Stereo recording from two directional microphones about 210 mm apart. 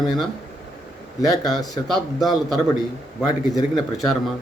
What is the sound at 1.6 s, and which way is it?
Speech, 15° left (ahead or behind).